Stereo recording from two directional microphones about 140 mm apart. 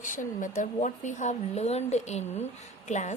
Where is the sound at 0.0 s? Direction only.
65° left (ahead or behind).